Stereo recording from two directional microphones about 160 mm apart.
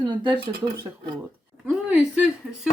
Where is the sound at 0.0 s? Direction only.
30° right (ahead or behind).